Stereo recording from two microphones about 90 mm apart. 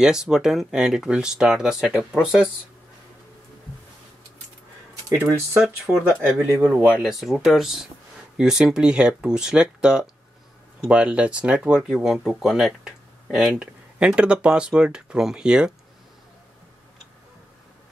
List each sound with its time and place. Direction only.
0.0 s speech: 5° right (ahead or behind)
5.1 s speech: 20° right (ahead or behind)
6.6 s speech: 15° right (ahead or behind)